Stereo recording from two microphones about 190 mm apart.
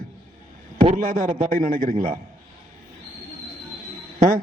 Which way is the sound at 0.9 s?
45° right (ahead or behind).